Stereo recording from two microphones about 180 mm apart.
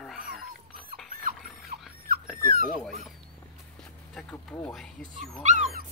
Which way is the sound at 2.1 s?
55° right (ahead or behind).